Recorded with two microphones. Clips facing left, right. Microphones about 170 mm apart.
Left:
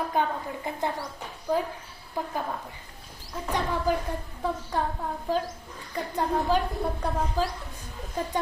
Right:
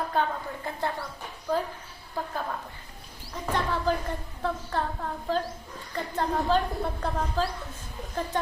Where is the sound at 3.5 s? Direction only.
15° left (ahead or behind).